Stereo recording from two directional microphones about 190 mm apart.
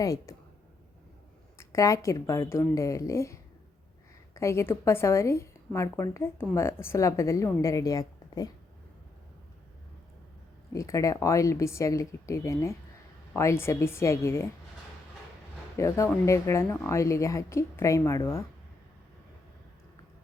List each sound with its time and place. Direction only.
0.0 s a woman's voice: 15° left (ahead or behind)
1.5 s a woman's voice: 15° left (ahead or behind)
10.7 s a woman's voice: 15° left (ahead or behind)
15.8 s a woman's voice: 15° left (ahead or behind)